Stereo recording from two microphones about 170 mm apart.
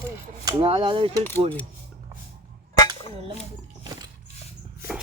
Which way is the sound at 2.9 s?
30° right (ahead or behind).